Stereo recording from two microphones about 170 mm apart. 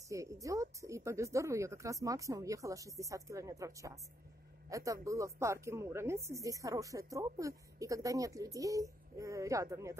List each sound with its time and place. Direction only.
0.1 s speech: 20° right (ahead or behind)